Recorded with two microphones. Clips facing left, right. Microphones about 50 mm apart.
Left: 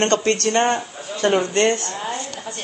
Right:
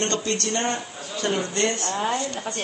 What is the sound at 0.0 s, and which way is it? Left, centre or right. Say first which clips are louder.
A man's voice: left 7 dB; left.